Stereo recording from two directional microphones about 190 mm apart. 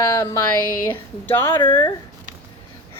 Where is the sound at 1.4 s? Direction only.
25° left (ahead or behind).